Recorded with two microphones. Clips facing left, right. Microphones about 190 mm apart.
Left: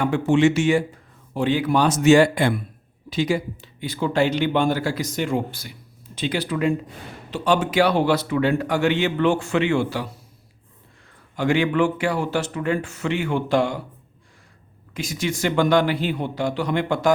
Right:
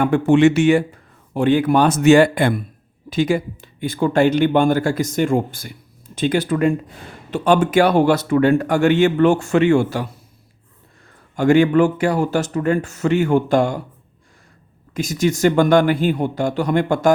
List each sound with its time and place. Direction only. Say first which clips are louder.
0.0 s a man's voice: right 5 dB; 55° right (ahead or behind)
11.3 s a man's voice: right 6 dB; 45° right (ahead or behind)
14.9 s a man's voice: right 7 dB; 45° right (ahead or behind)